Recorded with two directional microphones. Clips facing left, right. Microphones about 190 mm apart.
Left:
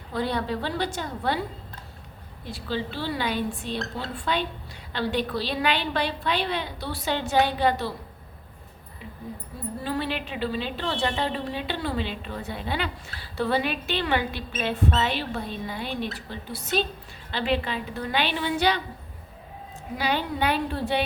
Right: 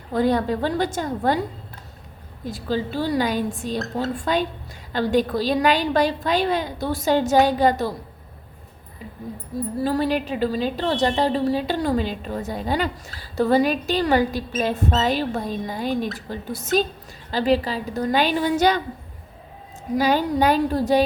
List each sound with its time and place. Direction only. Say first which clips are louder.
0.1 s a woman's voice: right 7 dB; 45° right (ahead or behind)
2.4 s a woman's voice: right 5 dB; 45° right (ahead or behind)
9.7 s a woman's voice: right 7 dB; 40° right (ahead or behind)
20.0 s a woman's voice: right 7 dB; 40° right (ahead or behind)